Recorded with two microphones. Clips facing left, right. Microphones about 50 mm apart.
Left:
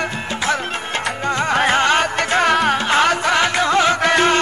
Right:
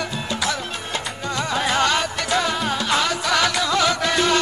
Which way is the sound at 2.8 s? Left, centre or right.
Left.